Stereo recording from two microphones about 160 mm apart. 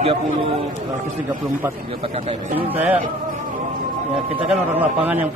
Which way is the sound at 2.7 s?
10° right (ahead or behind).